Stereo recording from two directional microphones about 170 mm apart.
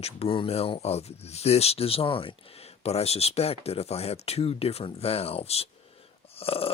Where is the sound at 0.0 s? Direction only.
35° left (ahead or behind).